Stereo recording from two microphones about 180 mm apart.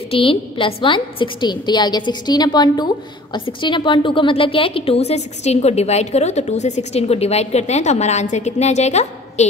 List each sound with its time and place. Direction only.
0.1 s a woman's voice: 30° left (ahead or behind)